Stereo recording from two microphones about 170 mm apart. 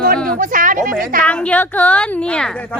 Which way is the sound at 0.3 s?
50° right (ahead or behind).